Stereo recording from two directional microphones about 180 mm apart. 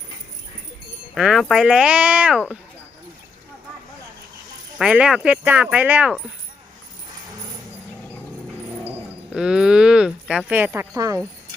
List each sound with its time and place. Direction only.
1.1 s speech: centre (ahead or behind)
4.8 s speech: 5° right (ahead or behind)
9.3 s speech: 5° right (ahead or behind)